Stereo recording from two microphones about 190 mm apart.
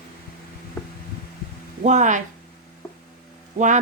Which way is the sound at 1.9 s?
40° right (ahead or behind).